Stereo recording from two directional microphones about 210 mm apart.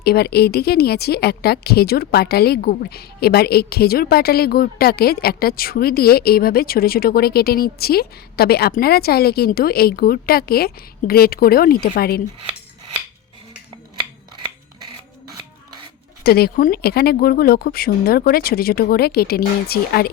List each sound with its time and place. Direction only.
0.0 s speech: 50° left (ahead or behind)
16.2 s speech: 45° left (ahead or behind)